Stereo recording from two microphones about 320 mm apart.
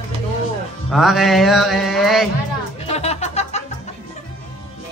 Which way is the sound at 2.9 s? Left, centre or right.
Centre.